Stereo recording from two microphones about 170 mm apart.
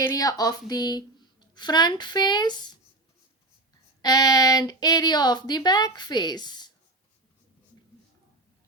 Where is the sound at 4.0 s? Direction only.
25° left (ahead or behind).